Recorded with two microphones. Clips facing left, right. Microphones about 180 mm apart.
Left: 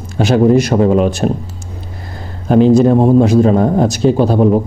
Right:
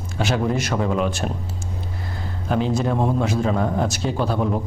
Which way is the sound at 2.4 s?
40° left (ahead or behind).